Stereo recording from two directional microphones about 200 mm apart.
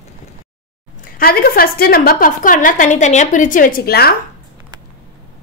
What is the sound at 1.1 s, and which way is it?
A woman's voice, 45° left (ahead or behind).